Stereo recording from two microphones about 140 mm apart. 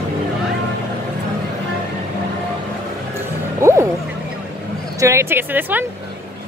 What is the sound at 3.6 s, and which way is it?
Music, 20° right (ahead or behind).